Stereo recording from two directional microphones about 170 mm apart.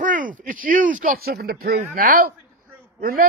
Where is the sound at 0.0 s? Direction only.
50° right (ahead or behind).